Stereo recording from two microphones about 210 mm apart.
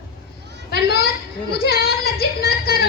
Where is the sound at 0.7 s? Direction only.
50° left (ahead or behind).